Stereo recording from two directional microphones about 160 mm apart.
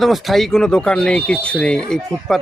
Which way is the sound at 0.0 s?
Centre (ahead or behind).